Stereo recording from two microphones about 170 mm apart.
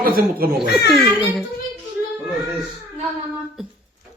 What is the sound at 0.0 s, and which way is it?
Speech, 60° right (ahead or behind).